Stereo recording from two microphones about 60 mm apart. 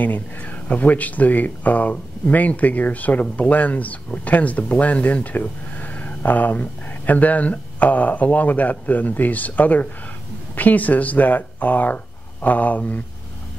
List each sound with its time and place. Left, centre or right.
0.0 s speech: left